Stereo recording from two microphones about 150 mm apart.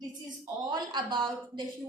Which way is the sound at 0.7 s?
30° right (ahead or behind).